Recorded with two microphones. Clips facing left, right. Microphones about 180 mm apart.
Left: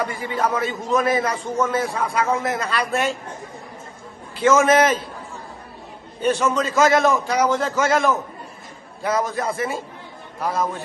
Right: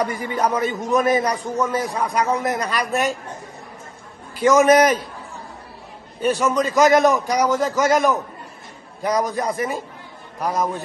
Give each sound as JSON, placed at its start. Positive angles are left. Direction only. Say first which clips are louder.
{"t": 0.4, "sound": "a man's voice", "louder": "right 2 dB", "side_deg": -15}
{"t": 4.5, "sound": "a man's voice", "louder": "right 2 dB", "side_deg": -15}
{"t": 6.2, "sound": "a man's voice", "louder": "right 1 dB", "side_deg": -10}